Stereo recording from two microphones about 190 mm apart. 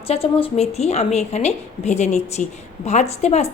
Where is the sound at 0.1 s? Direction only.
30° left (ahead or behind).